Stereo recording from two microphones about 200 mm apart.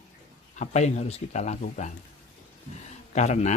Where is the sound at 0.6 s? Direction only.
35° left (ahead or behind).